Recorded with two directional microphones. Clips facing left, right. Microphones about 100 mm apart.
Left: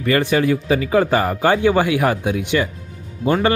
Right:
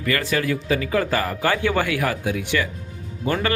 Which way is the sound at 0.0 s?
25° left (ahead or behind).